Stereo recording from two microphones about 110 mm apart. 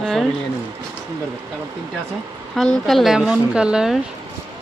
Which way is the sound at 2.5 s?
5° left (ahead or behind).